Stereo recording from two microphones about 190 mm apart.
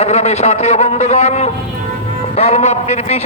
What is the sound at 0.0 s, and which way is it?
A man's voice, 35° left (ahead or behind).